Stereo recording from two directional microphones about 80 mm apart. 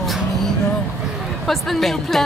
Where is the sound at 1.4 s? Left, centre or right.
Centre.